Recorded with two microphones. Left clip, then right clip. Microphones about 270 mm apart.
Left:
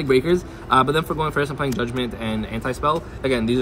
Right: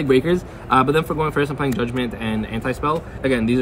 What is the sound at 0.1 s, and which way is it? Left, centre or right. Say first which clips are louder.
Speech: even; centre.